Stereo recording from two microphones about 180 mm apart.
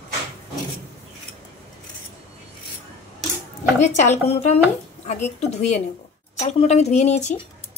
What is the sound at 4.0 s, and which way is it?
A woman's voice, 40° left (ahead or behind).